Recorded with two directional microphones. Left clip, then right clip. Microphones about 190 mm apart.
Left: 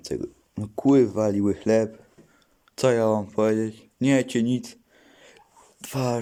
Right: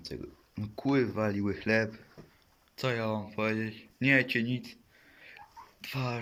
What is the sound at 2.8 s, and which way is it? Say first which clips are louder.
Speech: left 12 dB; 45° left (ahead or behind).